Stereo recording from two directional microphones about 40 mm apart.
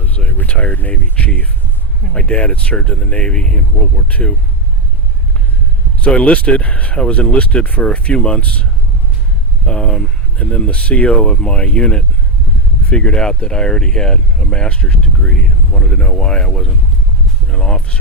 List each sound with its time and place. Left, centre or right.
0.4 s speech: left
1.1 s speech: left
6.1 s speech: left
9.6 s speech: left
10.3 s speech: left
11.3 s speech: left
11.5 s speech: left
11.8 s speech: left